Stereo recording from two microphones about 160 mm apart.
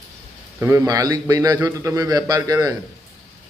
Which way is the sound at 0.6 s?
15° right (ahead or behind).